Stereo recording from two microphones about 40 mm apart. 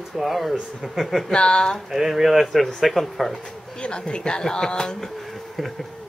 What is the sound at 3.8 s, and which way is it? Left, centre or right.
Speech, left.